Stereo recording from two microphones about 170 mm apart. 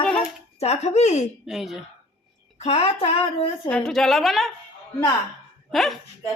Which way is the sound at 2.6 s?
40° left (ahead or behind).